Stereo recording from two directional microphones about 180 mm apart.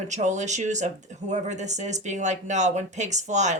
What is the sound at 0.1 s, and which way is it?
Speech, 40° right (ahead or behind).